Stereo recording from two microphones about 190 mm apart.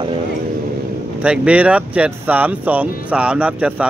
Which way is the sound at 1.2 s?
5° right (ahead or behind).